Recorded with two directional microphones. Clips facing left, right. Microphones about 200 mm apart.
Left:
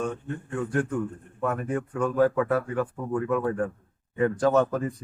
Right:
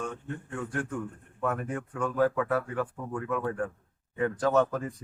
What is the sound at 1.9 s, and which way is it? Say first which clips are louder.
Speech: left 4 dB; 35° left (ahead or behind).